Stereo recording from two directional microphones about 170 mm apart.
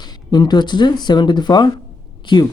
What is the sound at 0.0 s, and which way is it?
Speech, 25° left (ahead or behind).